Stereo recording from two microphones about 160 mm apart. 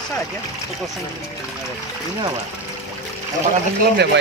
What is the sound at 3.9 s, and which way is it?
Speech, 90° right.